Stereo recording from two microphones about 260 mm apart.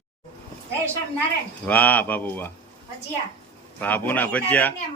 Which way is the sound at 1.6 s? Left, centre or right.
Centre.